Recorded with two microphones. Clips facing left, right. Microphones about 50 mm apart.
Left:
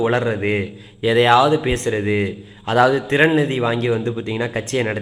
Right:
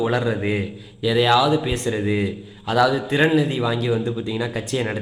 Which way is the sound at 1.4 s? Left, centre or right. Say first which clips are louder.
Left 3 dB; centre.